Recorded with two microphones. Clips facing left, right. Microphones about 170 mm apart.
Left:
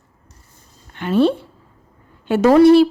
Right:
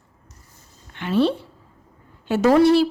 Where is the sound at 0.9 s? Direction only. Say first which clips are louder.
Left 4 dB; 45° left (ahead or behind).